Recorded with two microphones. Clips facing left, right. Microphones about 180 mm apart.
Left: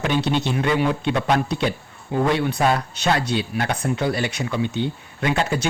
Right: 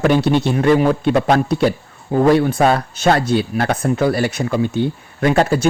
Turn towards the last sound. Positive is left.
turn(degrees=-45)  # may be behind; listen again after turning